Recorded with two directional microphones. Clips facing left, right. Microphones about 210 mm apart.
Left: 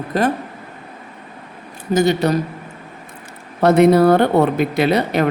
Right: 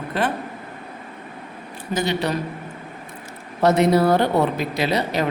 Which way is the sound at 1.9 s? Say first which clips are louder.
Left 7 dB; 45° left (ahead or behind).